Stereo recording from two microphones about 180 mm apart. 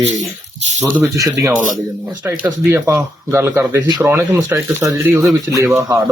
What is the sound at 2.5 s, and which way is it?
Speech, 15° right (ahead or behind).